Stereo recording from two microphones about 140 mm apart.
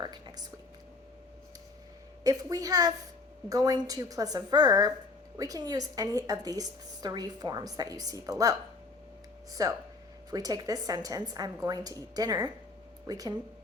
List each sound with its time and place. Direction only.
0.0 s speech: 30° right (ahead or behind)
2.2 s a woman's voice: 25° right (ahead or behind)